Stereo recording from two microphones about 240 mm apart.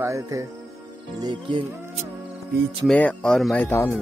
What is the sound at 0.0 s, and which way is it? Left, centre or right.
Speech, centre.